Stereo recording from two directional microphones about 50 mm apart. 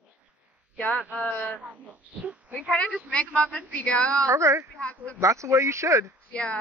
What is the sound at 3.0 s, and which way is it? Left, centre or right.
A woman's voice, left.